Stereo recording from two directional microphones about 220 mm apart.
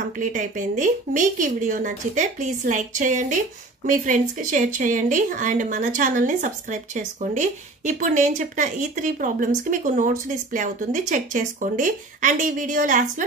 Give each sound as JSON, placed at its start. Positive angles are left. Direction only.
{"t": 0.2, "sound": "speech", "side_deg": -35}